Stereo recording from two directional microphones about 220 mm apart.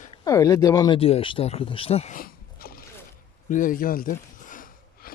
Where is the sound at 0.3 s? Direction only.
15° left (ahead or behind).